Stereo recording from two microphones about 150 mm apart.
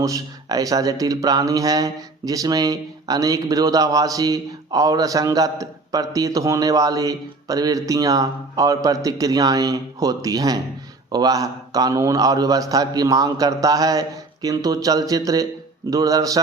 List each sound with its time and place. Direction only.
0.0 s speech: 25° right (ahead or behind)